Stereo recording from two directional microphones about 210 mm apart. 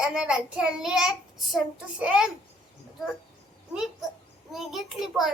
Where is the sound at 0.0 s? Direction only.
Centre (ahead or behind).